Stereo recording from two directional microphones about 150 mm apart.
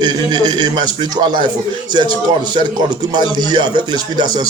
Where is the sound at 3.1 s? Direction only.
30° right (ahead or behind).